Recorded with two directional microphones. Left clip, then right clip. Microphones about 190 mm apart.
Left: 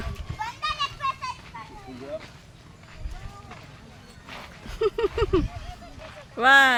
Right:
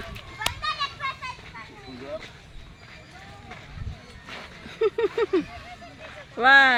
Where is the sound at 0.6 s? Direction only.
65° left (ahead or behind).